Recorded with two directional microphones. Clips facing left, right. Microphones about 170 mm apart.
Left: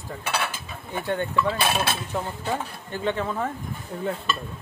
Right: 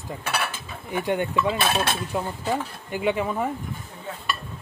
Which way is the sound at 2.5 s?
10° right (ahead or behind).